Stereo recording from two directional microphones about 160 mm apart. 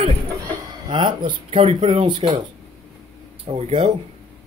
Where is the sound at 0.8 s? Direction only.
30° right (ahead or behind).